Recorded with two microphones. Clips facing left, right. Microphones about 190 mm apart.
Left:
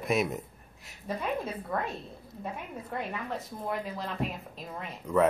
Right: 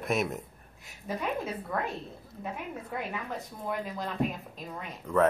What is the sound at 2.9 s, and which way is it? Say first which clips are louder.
Speech: left 2 dB; centre (ahead or behind).